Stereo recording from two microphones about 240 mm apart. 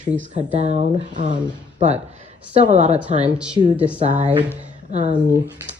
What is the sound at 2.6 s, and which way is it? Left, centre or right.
Speech, right.